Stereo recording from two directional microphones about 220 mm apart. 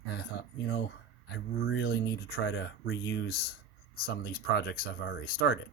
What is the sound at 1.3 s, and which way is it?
Speech, 55° left (ahead or behind).